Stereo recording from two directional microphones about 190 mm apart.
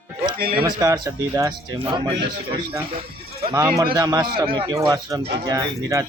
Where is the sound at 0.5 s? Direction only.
20° right (ahead or behind).